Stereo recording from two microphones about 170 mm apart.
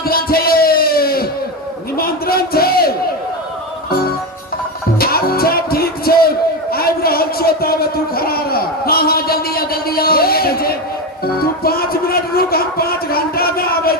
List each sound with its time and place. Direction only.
0.0 s music: 65° left (ahead or behind)
2.0 s a sound: 60° left (ahead or behind)
4.9 s music: 65° left (ahead or behind)